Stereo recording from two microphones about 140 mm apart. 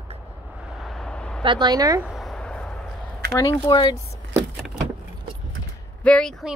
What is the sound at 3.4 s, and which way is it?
Speech, 30° left (ahead or behind).